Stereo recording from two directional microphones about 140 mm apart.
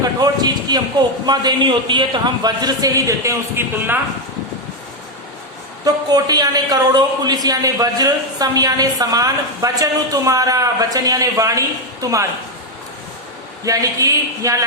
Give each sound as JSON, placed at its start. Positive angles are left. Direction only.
{"t": 0.0, "sound": "speech", "side_deg": -30}
{"t": 5.8, "sound": "speech", "side_deg": -30}
{"t": 13.7, "sound": "speech", "side_deg": -25}